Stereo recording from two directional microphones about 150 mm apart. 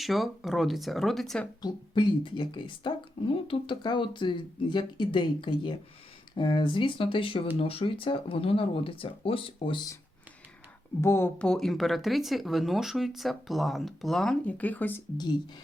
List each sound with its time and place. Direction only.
0.0 s speech: centre (ahead or behind)
1.6 s speech: 30° left (ahead or behind)
11.0 s speech: 15° left (ahead or behind)
11.4 s speech: centre (ahead or behind)